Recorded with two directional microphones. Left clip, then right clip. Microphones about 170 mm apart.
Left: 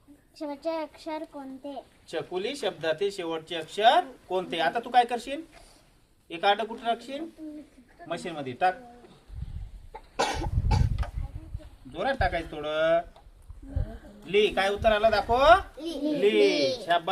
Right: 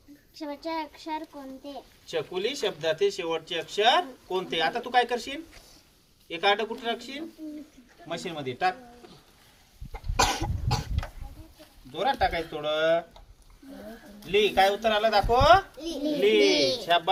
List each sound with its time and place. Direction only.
0.3 s speech: 15° left (ahead or behind)
10.2 s cough: 25° right (ahead or behind)
11.0 s a sound: 10° right (ahead or behind)
11.9 s speech: 5° left (ahead or behind)
14.3 s speech: 5° left (ahead or behind)
15.8 s speech: 5° right (ahead or behind)
16.5 s speech: 55° right (ahead or behind)